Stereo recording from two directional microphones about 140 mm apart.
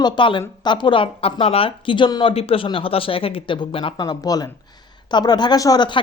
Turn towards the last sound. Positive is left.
turn(degrees=30)  # may be behind; listen again after turning